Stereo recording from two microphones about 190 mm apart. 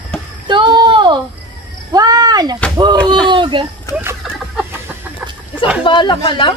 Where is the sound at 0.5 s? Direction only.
25° right (ahead or behind).